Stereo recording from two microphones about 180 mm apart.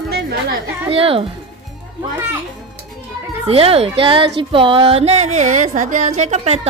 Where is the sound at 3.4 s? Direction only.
35° right (ahead or behind).